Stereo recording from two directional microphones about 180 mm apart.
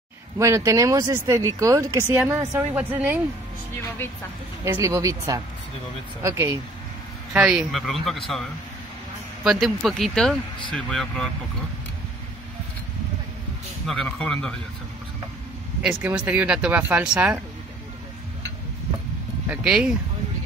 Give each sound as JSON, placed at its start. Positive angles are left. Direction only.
{"t": 0.4, "sound": "speech", "side_deg": -15}
{"t": 4.6, "sound": "speech", "side_deg": -15}
{"t": 7.3, "sound": "speech", "side_deg": -5}
{"t": 9.4, "sound": "speech", "side_deg": 0}
{"t": 13.8, "sound": "speech", "side_deg": 5}
{"t": 15.8, "sound": "speech", "side_deg": -5}
{"t": 19.5, "sound": "speech", "side_deg": -5}